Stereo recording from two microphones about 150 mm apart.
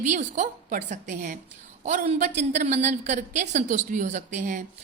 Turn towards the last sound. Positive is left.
turn(degrees=-60)  # may be behind; listen again after turning